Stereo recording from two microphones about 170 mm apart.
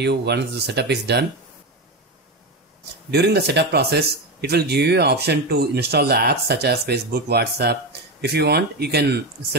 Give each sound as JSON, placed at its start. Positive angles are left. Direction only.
{"t": 0.0, "sound": "speech", "side_deg": -75}
{"t": 3.1, "sound": "speech", "side_deg": -75}